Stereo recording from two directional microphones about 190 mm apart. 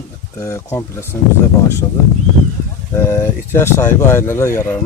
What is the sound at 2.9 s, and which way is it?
Speech, 15° left (ahead or behind).